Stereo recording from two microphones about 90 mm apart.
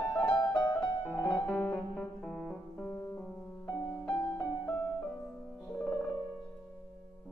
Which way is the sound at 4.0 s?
25° left (ahead or behind).